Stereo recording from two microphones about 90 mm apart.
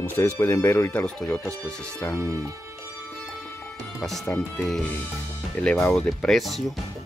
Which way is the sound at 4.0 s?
5° left (ahead or behind).